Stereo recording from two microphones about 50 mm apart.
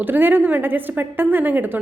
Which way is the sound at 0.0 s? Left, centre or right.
Right.